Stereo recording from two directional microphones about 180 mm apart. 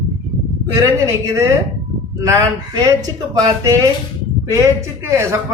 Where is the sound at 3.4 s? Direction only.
20° right (ahead or behind).